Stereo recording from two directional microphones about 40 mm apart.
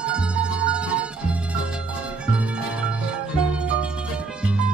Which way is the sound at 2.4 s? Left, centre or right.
Right.